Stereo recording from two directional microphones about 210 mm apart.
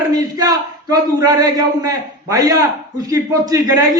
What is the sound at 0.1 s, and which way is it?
A man's voice, 15° right (ahead or behind).